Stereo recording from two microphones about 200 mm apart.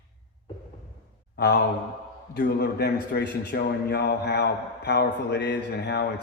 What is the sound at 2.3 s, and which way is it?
A man's voice, 55° left (ahead or behind).